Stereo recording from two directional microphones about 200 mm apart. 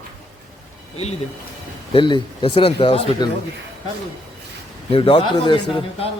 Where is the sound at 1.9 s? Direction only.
25° left (ahead or behind).